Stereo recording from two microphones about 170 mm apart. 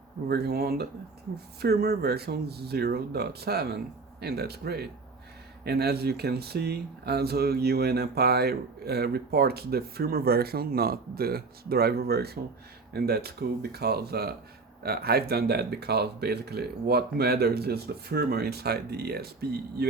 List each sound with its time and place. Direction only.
0.3 s speech: 70° right (ahead or behind)